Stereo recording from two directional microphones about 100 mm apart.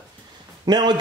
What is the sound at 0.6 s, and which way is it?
Speech, 45° right (ahead or behind).